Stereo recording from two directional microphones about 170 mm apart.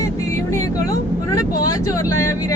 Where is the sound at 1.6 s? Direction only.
20° left (ahead or behind).